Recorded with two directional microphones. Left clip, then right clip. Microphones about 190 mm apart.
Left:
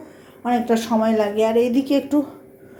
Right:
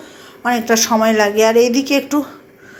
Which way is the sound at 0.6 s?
25° right (ahead or behind).